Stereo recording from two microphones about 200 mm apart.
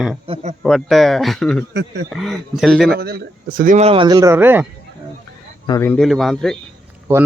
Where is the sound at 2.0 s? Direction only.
Centre (ahead or behind).